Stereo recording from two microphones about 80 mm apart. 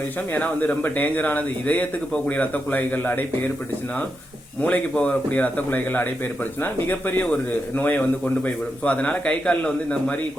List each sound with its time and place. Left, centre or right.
0.3 s speech: left
4.6 s a man's voice: centre